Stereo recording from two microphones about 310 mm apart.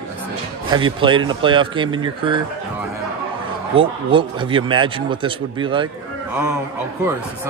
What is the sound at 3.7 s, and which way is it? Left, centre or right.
Speech, centre.